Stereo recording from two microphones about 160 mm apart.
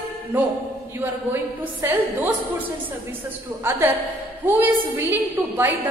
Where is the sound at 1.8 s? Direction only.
10° right (ahead or behind).